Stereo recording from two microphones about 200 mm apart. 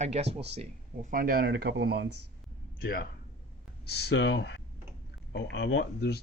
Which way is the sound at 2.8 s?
45° left (ahead or behind).